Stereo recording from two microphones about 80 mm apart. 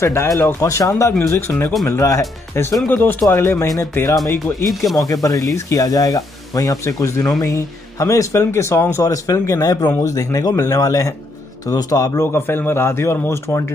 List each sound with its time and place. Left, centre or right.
0.0 s a man's voice: left
2.9 s a man's voice: left
4.6 s speech: centre
5.0 s a man's voice: left
12.4 s a man's voice: left